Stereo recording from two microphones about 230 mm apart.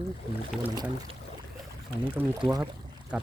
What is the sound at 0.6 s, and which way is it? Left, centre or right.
Speech, centre.